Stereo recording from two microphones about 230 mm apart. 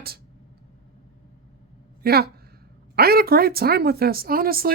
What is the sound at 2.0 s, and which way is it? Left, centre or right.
Speech, right.